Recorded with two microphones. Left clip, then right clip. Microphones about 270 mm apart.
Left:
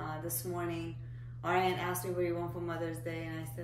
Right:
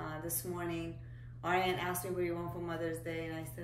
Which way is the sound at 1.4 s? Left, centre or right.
Centre.